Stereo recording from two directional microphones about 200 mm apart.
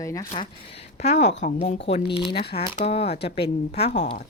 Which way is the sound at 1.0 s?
35° left (ahead or behind).